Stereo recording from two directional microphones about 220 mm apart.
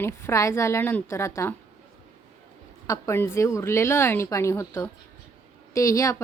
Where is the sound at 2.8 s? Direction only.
15° left (ahead or behind).